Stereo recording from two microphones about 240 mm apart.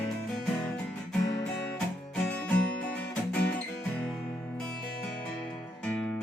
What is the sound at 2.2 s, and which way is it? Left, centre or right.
Music, centre.